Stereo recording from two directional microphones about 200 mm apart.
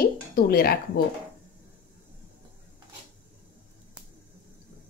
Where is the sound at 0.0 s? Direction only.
50° left (ahead or behind).